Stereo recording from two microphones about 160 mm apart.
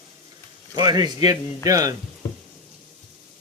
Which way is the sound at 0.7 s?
25° right (ahead or behind).